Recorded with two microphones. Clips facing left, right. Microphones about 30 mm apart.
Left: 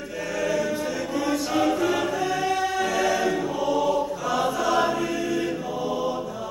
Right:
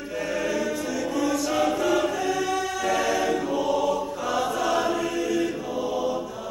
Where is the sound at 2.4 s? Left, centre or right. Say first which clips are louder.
Left 2 dB; left.